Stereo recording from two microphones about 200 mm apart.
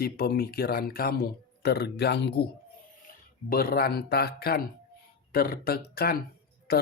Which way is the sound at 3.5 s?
50° left (ahead or behind).